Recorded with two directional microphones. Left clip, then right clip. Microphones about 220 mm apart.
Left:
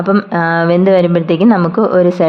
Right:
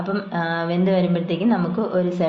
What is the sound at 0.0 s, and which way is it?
Speech, 45° left (ahead or behind).